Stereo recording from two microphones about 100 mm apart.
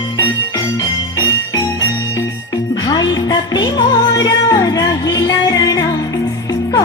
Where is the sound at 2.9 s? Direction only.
45° left (ahead or behind).